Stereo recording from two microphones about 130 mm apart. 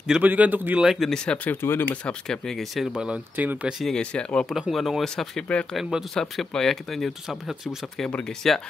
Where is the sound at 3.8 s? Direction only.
5° left (ahead or behind).